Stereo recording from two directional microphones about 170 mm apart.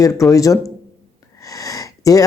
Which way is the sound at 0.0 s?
20° left (ahead or behind).